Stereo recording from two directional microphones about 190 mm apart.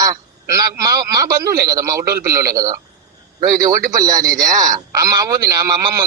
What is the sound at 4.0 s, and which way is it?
A man's voice, 20° right (ahead or behind).